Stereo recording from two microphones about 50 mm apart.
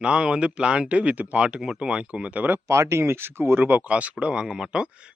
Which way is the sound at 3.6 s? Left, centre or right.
Right.